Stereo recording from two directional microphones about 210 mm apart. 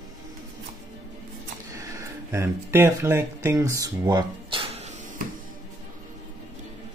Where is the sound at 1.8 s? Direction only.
15° right (ahead or behind).